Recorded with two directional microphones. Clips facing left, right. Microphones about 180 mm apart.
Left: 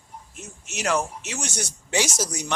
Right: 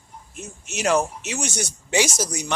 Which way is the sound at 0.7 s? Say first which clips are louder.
Right 4 dB; 20° right (ahead or behind).